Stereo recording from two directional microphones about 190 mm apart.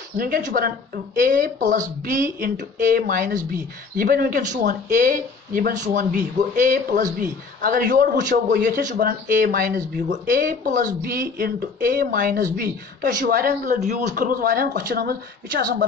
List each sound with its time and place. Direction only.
0.5 s speech: 45° right (ahead or behind)
8.3 s speech: 55° right (ahead or behind)